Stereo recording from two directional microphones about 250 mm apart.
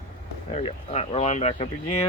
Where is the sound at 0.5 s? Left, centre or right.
Left.